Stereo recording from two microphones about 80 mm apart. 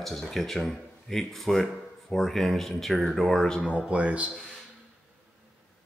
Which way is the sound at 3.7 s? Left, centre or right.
Centre.